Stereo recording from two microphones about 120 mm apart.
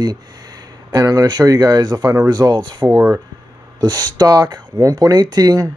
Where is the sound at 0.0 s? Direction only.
35° right (ahead or behind).